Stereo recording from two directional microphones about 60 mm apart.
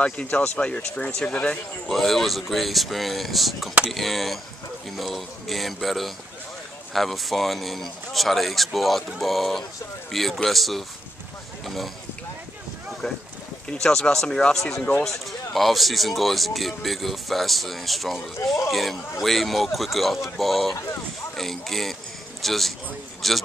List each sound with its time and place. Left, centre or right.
0.0 s speech: left
1.9 s speech: centre
13.0 s speech: centre